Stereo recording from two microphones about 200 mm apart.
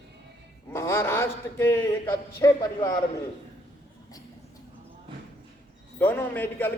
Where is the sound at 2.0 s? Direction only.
20° left (ahead or behind).